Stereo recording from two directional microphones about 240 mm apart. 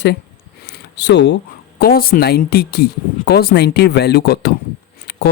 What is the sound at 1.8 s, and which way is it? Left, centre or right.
Speech, left.